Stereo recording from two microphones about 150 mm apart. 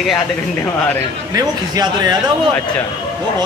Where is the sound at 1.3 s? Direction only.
25° right (ahead or behind).